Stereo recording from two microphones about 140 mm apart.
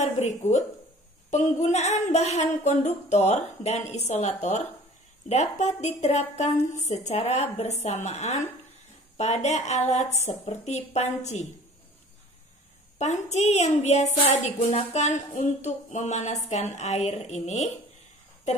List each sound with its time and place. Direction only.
0.0 s a woman's voice: 55° left (ahead or behind)
13.0 s a woman's voice: 55° left (ahead or behind)